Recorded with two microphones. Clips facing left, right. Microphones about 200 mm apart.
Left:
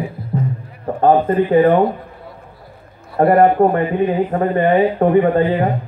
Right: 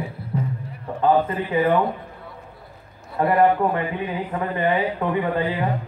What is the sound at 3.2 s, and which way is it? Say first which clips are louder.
Speech: left 6 dB; 50° left (ahead or behind).